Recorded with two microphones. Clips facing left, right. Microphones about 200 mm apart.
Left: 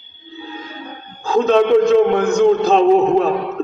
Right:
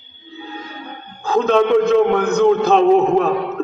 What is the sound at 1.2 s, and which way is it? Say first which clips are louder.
A man's voice: left 1 dB; 60° right (ahead or behind).